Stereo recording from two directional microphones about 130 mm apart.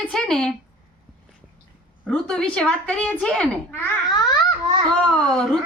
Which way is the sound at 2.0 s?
10° left (ahead or behind).